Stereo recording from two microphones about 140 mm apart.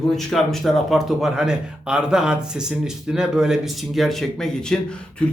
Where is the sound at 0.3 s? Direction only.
Centre (ahead or behind).